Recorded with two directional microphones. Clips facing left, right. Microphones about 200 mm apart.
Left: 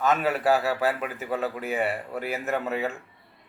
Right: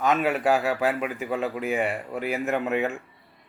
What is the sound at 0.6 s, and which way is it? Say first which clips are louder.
Speech: right 1 dB; 15° right (ahead or behind).